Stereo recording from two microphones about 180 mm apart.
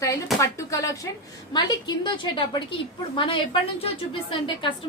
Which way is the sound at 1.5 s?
25° left (ahead or behind).